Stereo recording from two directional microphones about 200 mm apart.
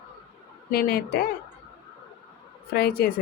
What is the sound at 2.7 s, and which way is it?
Speech, 50° left (ahead or behind).